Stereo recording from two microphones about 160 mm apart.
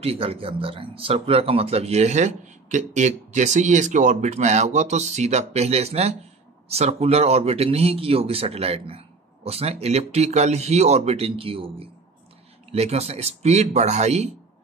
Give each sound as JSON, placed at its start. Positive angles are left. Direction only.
{"t": 0.0, "sound": "speech", "side_deg": -35}